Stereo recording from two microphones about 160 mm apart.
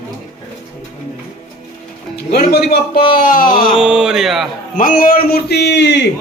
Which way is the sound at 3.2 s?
60° left (ahead or behind).